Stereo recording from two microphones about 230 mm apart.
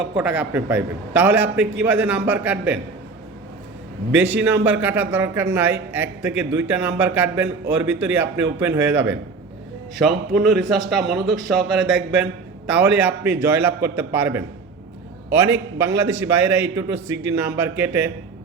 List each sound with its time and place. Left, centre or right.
0.2 s a man's voice: centre
4.1 s a man's voice: centre
16.0 s a man's voice: centre